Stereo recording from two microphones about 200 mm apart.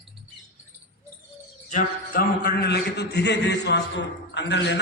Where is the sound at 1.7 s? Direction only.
45° left (ahead or behind).